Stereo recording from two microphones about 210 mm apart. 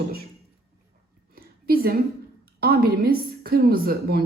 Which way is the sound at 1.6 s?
45° right (ahead or behind).